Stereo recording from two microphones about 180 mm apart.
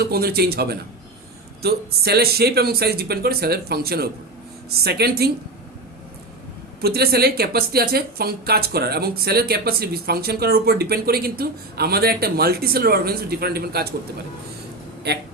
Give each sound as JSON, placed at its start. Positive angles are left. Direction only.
{"t": 0.0, "sound": "speech", "side_deg": -60}
{"t": 6.8, "sound": "speech", "side_deg": -60}